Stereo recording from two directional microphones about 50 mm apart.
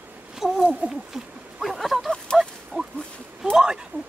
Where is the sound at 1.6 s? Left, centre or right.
Centre.